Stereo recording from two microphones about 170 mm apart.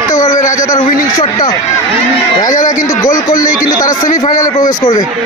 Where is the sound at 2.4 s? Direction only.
50° left (ahead or behind).